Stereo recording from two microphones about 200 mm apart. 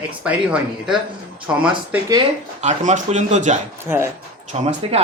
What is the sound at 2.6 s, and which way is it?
Speech, 35° right (ahead or behind).